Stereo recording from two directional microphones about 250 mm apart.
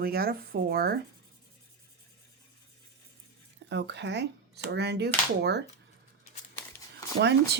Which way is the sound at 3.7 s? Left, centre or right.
Right.